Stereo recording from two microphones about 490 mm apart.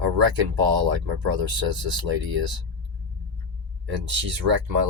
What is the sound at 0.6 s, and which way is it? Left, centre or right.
Speech, right.